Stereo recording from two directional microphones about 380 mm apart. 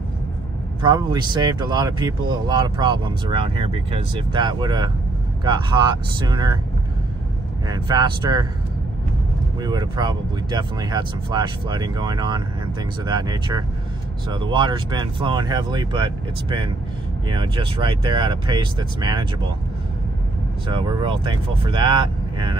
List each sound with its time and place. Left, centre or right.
0.8 s speech: centre
7.6 s speech: centre
9.6 s speech: centre
20.6 s speech: centre